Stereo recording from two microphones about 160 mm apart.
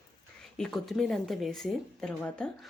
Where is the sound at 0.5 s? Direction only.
Centre (ahead or behind).